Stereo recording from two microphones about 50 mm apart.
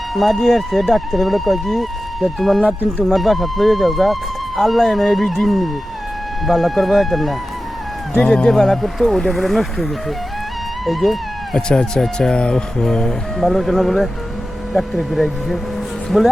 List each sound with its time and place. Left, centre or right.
0.1 s speech: centre
8.1 s speech: centre
8.5 s speech: centre
11.7 s speech: centre